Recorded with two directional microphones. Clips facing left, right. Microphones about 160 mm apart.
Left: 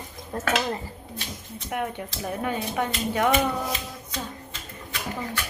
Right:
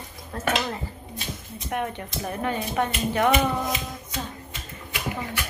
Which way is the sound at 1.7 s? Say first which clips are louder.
Right 1 dB; 10° left (ahead or behind).